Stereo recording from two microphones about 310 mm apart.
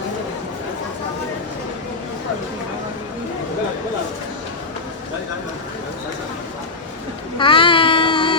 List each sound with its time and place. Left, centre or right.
7.3 s child singing: centre